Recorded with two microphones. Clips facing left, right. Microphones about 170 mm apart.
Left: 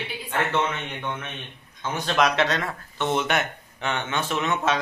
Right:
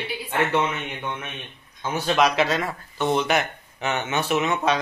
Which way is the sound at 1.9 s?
5° right (ahead or behind).